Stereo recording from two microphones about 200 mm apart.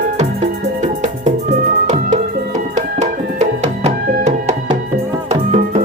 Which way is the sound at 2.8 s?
35° right (ahead or behind).